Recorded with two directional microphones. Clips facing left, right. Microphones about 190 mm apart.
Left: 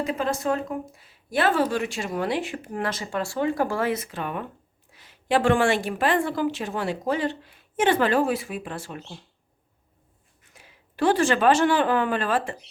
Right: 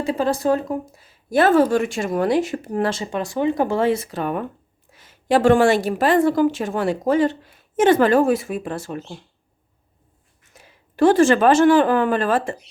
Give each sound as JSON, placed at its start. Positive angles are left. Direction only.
{"t": 0.0, "sound": "speech", "side_deg": -30}
{"t": 10.6, "sound": "speech", "side_deg": -45}